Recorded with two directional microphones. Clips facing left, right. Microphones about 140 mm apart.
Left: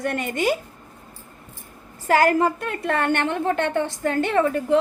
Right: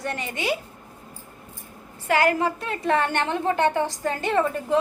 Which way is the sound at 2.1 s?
40° left (ahead or behind).